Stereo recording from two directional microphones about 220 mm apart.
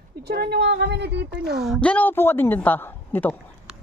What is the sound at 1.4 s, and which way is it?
A woman's voice, centre (ahead or behind).